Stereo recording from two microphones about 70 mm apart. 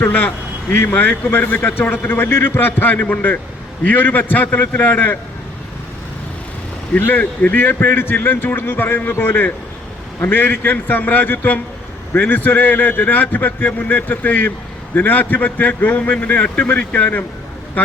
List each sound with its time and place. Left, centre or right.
0.0 s a man's voice: left
6.9 s a man's voice: left